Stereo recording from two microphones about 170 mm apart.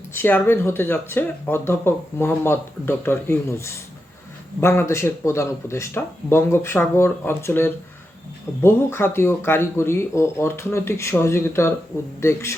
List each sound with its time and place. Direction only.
0.1 s speech: 10° left (ahead or behind)